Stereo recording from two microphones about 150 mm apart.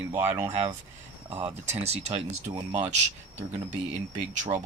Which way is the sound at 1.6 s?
45° right (ahead or behind).